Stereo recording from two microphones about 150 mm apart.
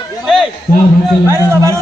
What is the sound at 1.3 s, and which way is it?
Speech, 20° right (ahead or behind).